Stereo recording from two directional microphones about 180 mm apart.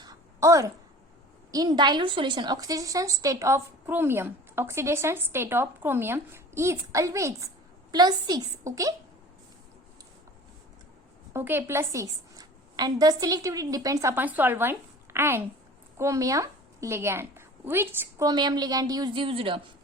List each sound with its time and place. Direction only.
0.0 s a sound: 20° right (ahead or behind)
1.5 s a woman's voice: 20° right (ahead or behind)
11.3 s a woman's voice: 10° right (ahead or behind); by 19.6 s 30° right (ahead or behind)